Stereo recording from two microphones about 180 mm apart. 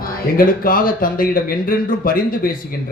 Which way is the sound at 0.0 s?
50° left (ahead or behind).